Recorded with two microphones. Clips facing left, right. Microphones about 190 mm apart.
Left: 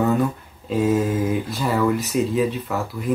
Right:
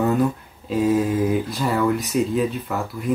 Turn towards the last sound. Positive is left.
turn(degrees=0)  # may be behind; listen again after turning